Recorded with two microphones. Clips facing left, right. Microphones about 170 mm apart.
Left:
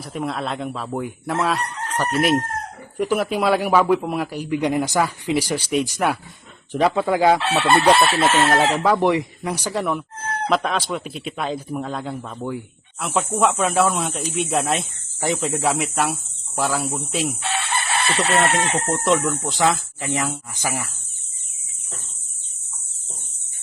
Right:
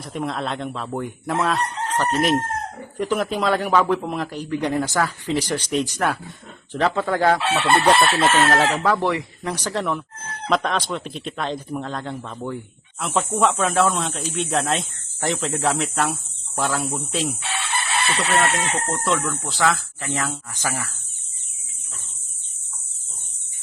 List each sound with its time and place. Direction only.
0.0 s speech: 5° left (ahead or behind)
2.2 s a man's voice: 10° left (ahead or behind)
7.6 s a man's voice: centre (ahead or behind)
17.4 s chicken: 55° left (ahead or behind)
18.3 s a man's voice: 25° left (ahead or behind)